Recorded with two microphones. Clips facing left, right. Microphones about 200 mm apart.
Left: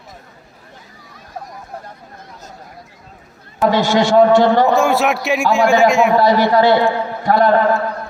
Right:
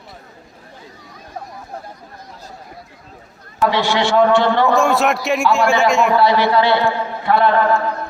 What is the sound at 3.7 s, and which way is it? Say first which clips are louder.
A man's voice: left 4 dB; 45° left (ahead or behind).